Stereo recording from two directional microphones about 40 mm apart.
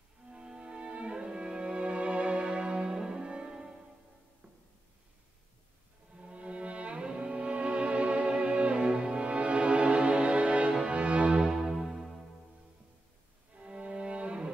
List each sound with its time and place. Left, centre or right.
0.2 s music: right
6.1 s music: right
11.4 s music: centre
13.6 s violin: right